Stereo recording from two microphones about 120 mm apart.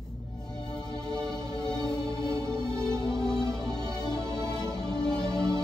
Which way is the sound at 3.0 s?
35° left (ahead or behind).